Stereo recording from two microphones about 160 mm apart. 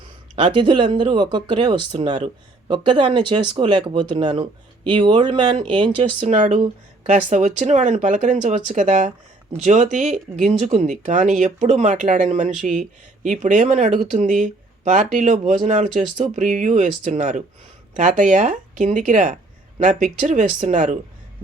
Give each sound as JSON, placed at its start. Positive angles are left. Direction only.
{"t": 0.3, "sound": "speech", "side_deg": -30}
{"t": 6.2, "sound": "speech", "side_deg": -50}